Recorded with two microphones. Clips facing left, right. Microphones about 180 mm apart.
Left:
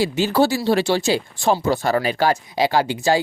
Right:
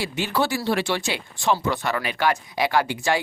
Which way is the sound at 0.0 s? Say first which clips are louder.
Left 7 dB; 30° left (ahead or behind).